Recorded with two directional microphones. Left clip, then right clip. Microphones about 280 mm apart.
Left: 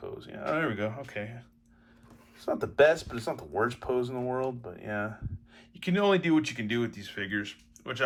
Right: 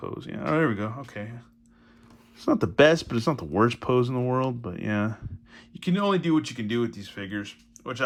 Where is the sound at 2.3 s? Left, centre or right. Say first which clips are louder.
Right 4 dB; right.